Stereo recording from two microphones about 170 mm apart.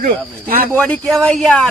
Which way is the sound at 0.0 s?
55° right (ahead or behind).